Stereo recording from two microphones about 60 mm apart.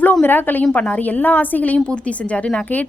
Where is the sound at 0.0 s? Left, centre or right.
Left.